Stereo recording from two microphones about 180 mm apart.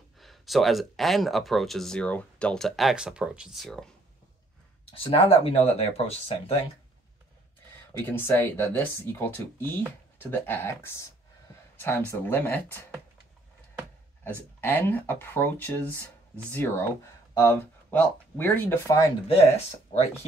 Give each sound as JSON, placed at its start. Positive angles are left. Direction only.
{"t": 0.2, "sound": "speech", "side_deg": 0}
{"t": 4.9, "sound": "speech", "side_deg": 30}
{"t": 8.1, "sound": "speech", "side_deg": 15}
{"t": 14.6, "sound": "speech", "side_deg": 10}
{"t": 19.2, "sound": "speech", "side_deg": 35}